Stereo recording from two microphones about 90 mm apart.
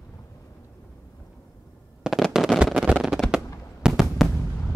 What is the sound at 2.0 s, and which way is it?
Fireworks, 5° right (ahead or behind).